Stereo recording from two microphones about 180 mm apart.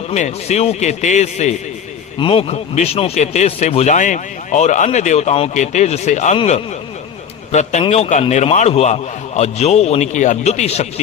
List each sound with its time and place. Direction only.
0.1 s speech: 40° left (ahead or behind)